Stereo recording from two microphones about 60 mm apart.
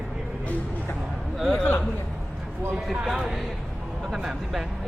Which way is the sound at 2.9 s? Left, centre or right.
Centre.